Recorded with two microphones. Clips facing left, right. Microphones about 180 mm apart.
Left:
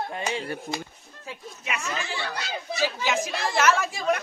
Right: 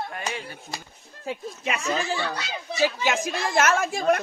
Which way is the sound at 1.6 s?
35° right (ahead or behind).